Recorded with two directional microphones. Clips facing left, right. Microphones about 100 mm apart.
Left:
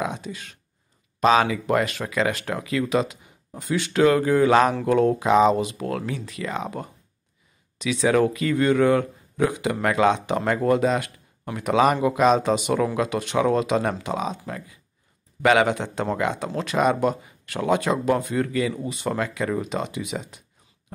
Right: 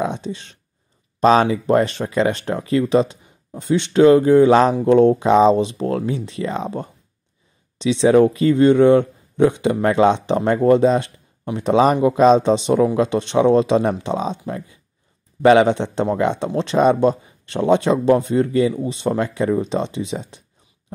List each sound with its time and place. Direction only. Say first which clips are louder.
0.0 s speech: right 5 dB; 30° right (ahead or behind)